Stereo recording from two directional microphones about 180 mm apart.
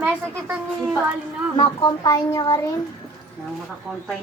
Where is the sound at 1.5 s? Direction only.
25° left (ahead or behind).